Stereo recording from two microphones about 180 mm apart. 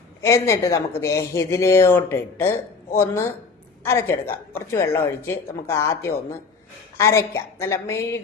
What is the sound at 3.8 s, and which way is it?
A woman's voice, 15° left (ahead or behind).